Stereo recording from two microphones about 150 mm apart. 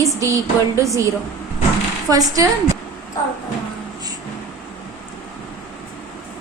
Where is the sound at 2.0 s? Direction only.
25° right (ahead or behind).